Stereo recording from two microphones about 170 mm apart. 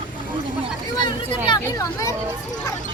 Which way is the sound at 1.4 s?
20° left (ahead or behind).